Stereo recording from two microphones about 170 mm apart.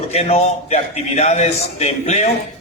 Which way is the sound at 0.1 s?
35° left (ahead or behind).